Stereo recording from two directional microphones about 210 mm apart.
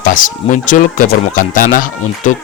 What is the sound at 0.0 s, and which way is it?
Speech, 40° left (ahead or behind).